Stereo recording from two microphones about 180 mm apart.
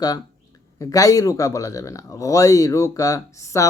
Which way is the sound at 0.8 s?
20° left (ahead or behind).